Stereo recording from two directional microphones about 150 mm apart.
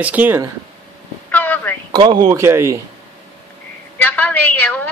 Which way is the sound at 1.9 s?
30° right (ahead or behind).